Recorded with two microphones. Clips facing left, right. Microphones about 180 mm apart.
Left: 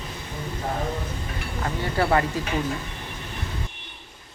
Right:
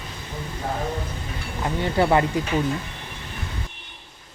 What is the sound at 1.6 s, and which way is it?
Speech, 20° right (ahead or behind).